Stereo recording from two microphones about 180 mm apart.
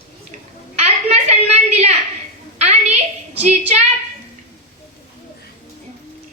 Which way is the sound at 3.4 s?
35° right (ahead or behind).